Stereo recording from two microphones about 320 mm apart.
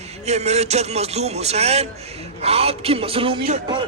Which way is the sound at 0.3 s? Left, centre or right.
Right.